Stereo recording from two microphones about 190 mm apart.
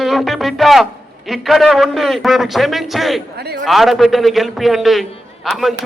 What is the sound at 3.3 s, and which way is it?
Speech, 55° right (ahead or behind).